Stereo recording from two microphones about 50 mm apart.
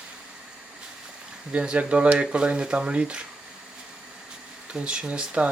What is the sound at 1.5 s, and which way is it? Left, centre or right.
Speech, right.